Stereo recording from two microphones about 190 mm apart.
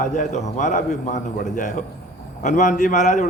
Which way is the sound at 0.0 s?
40° left (ahead or behind).